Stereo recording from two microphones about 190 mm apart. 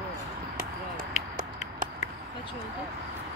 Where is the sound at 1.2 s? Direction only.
40° left (ahead or behind).